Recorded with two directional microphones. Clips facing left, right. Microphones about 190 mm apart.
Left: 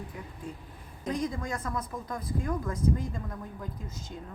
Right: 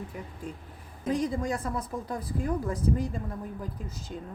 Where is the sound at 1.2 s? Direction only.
35° right (ahead or behind).